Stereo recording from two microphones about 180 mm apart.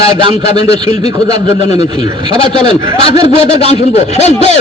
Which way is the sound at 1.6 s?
35° left (ahead or behind).